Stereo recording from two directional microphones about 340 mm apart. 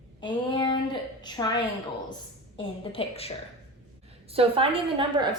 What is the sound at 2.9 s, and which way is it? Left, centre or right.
Speech, centre.